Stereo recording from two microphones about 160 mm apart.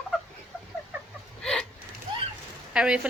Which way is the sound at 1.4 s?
5° left (ahead or behind).